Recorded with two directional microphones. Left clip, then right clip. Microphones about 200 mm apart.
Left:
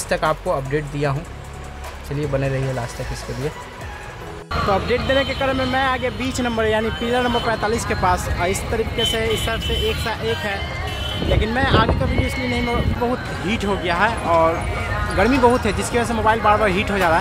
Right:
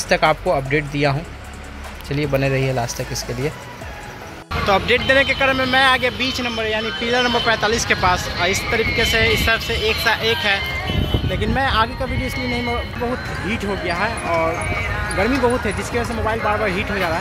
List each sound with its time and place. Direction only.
0.1 s speech: 5° right (ahead or behind)
2.1 s speech: 10° right (ahead or behind)
4.6 s speech: centre (ahead or behind)
6.3 s speech: 25° left (ahead or behind)
7.1 s speech: 15° left (ahead or behind)
8.7 s speech: 5° left (ahead or behind)
13.5 s speech: 5° left (ahead or behind)